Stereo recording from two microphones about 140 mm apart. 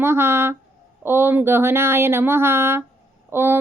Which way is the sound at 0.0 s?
15° right (ahead or behind).